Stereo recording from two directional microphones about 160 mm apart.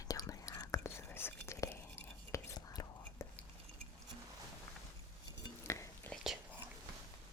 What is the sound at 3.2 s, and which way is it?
Cutlery, 20° left (ahead or behind).